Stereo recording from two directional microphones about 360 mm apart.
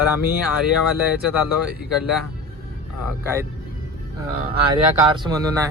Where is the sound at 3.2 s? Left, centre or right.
Centre.